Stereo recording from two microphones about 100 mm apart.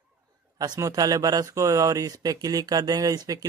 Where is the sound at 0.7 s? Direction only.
35° right (ahead or behind).